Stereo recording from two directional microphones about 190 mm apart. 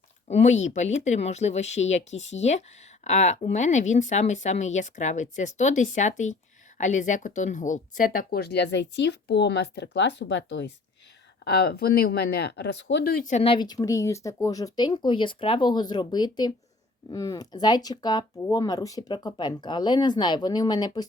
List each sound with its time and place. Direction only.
0.3 s speech: 35° left (ahead or behind)